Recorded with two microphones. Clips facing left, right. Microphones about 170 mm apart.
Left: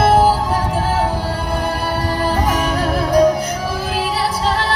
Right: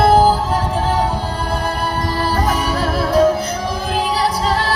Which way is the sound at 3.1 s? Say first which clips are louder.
Left 1 dB; 15° left (ahead or behind).